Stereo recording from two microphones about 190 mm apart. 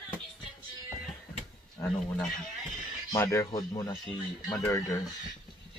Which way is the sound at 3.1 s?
15° left (ahead or behind).